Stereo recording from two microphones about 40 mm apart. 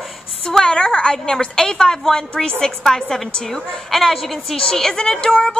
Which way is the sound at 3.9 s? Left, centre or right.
Centre.